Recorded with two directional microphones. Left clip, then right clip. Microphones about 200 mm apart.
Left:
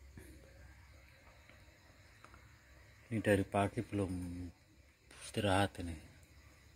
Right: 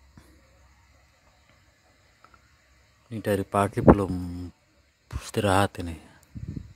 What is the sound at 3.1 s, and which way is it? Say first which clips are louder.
Speech: right 7 dB; 25° right (ahead or behind).